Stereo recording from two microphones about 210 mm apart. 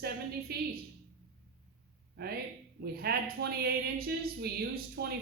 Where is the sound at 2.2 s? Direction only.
50° right (ahead or behind).